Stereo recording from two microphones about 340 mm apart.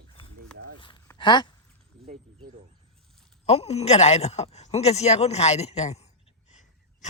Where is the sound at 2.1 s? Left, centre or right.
Centre.